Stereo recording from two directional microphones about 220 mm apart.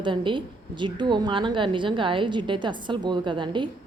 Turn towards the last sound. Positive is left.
turn(degrees=-20)  # may be behind; listen again after turning